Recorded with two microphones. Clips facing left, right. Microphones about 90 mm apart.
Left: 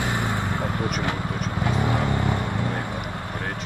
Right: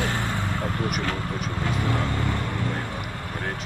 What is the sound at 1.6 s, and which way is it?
Vehicle, 20° left (ahead or behind).